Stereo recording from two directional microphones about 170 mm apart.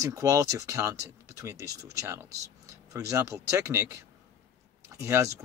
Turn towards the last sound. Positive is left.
turn(degrees=-15)  # may be behind; listen again after turning